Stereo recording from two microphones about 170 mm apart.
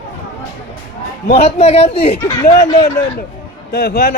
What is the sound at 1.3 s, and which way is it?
Speech, 40° left (ahead or behind).